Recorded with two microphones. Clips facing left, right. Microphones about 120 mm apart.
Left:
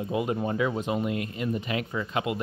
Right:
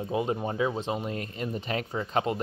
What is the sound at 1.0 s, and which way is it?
Speech, 35° right (ahead or behind).